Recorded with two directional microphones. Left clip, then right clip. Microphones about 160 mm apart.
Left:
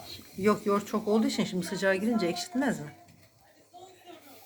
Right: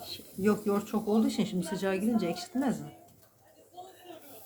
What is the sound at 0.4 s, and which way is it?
Speech, centre (ahead or behind).